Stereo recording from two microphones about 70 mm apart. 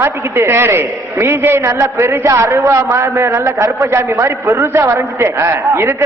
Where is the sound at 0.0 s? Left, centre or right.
Right.